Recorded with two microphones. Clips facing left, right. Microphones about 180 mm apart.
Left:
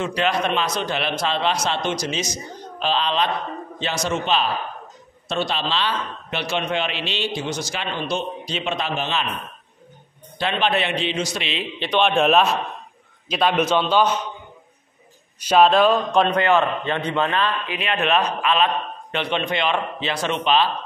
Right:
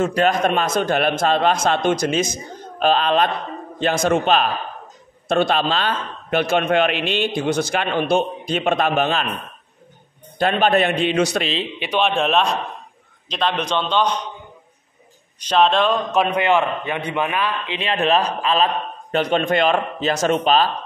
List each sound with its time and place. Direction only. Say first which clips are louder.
0.0 s a man's voice: right 4 dB; 45° right (ahead or behind)
10.4 s a man's voice: right 5 dB; 45° right (ahead or behind)
11.8 s a man's voice: left 2 dB; 5° right (ahead or behind)
15.4 s speech: left 2 dB; 5° left (ahead or behind)
16.2 s a man's voice: right 2 dB; 10° right (ahead or behind)
17.6 s a man's voice: right 3 dB; 30° right (ahead or behind)